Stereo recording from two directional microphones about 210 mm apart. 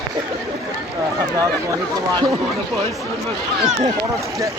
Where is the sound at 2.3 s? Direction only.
Centre (ahead or behind).